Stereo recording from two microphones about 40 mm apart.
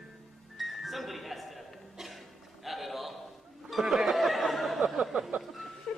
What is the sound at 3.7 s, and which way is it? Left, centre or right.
Chatter, centre.